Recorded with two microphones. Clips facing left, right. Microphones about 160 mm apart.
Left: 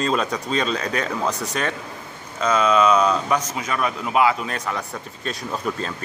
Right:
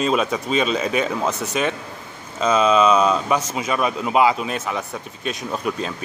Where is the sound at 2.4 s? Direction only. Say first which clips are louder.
Right 2 dB; 25° right (ahead or behind).